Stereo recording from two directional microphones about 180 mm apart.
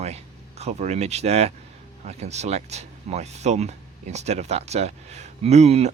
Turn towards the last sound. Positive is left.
turn(degrees=-35)  # may be behind; listen again after turning